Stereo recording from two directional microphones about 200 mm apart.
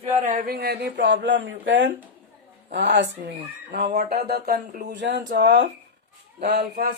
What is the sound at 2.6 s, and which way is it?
Speech, 60° right (ahead or behind).